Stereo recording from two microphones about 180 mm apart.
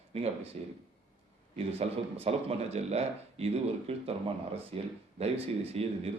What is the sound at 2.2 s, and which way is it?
Speech, 35° right (ahead or behind).